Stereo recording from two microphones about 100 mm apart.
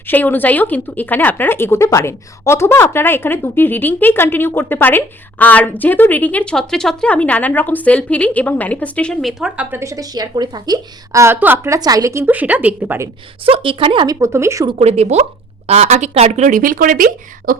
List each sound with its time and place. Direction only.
0.1 s speech: 20° left (ahead or behind)
9.2 s a woman's voice: 5° right (ahead or behind)
9.7 s a woman's voice: 35° right (ahead or behind)
11.2 s a woman's voice: 20° right (ahead or behind)
11.7 s a woman's voice: 40° right (ahead or behind)
12.2 s a woman's voice: 15° right (ahead or behind)
13.4 s a woman's voice: 65° right (ahead or behind)
14.1 s a woman's voice: 30° right (ahead or behind)
14.8 s speech: 90° right